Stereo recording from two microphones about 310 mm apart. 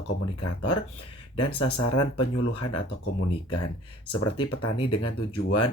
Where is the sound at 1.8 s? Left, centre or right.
Left.